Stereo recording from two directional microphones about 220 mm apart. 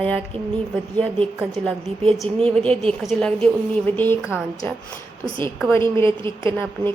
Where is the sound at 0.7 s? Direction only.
5° left (ahead or behind).